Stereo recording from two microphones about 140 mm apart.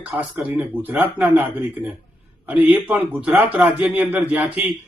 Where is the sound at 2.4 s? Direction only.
10° right (ahead or behind).